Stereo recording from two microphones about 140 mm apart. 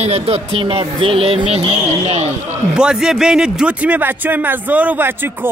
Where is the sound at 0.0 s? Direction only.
45° right (ahead or behind).